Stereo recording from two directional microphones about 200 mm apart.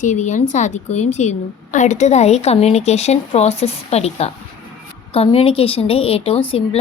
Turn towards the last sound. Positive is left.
turn(degrees=30)  # may be behind; listen again after turning